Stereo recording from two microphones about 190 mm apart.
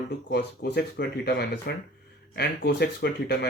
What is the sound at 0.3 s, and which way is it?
Speech, 60° left (ahead or behind).